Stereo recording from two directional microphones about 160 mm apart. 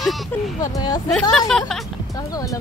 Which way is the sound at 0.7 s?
25° left (ahead or behind).